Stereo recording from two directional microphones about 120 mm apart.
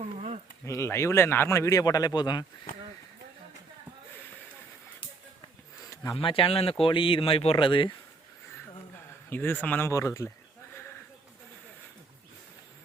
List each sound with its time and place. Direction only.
0.0 s a sound: 75° right (ahead or behind)
0.6 s speech: 25° left (ahead or behind)
6.1 s speech: 50° left (ahead or behind)
9.3 s a man's voice: 15° left (ahead or behind)
9.9 s speech: 25° left (ahead or behind)